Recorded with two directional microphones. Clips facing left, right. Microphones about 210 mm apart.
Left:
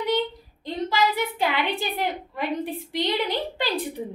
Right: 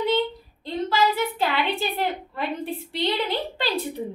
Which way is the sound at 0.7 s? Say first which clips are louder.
Right 1 dB; 15° left (ahead or behind).